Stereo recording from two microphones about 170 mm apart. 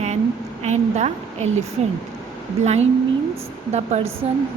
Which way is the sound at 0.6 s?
40° right (ahead or behind).